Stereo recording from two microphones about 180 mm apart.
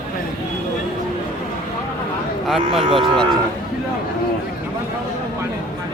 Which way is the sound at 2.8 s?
30° right (ahead or behind).